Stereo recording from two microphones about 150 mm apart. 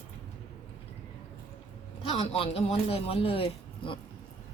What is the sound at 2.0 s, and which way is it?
Speech, 35° left (ahead or behind).